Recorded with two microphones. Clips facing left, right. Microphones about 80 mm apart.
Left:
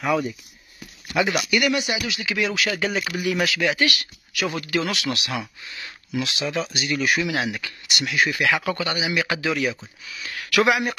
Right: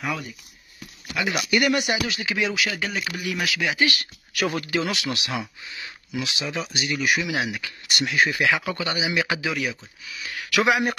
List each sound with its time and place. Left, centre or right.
1.5 s speech: right
2.3 s speech: centre
2.6 s speech: centre
3.8 s speech: right
4.7 s speech: centre
7.9 s speech: right
8.3 s speech: centre